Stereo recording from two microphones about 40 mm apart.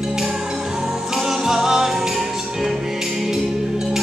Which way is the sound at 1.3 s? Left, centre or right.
Centre.